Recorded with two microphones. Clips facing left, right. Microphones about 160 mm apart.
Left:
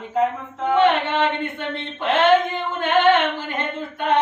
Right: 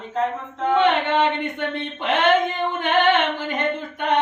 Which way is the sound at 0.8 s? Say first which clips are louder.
Left 1 dB; 20° right (ahead or behind).